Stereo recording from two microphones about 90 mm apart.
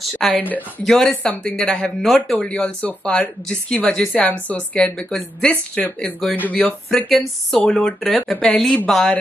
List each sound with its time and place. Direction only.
0.0 s a sound: 5° left (ahead or behind)
0.4 s speech: 20° left (ahead or behind)
0.8 s speech: 5° left (ahead or behind)